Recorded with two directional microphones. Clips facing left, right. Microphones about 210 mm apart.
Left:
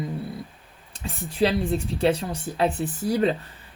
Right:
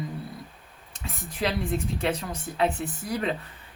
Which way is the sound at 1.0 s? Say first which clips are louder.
Left 6 dB; 30° left (ahead or behind).